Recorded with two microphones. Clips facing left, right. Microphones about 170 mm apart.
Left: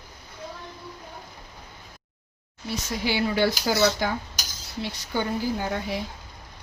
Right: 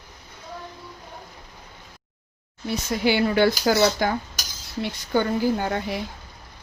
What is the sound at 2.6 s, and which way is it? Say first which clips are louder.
Speech: right 5 dB; 55° right (ahead or behind).